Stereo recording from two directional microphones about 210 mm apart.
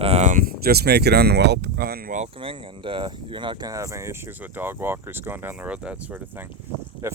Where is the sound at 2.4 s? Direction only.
25° right (ahead or behind).